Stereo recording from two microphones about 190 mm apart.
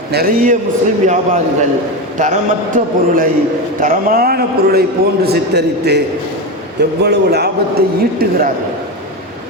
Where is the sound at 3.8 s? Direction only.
50° right (ahead or behind).